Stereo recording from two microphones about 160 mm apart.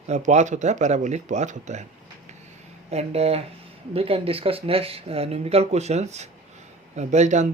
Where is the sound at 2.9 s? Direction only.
40° right (ahead or behind).